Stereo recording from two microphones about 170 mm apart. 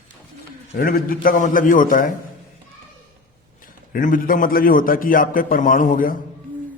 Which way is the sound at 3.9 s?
55° left (ahead or behind).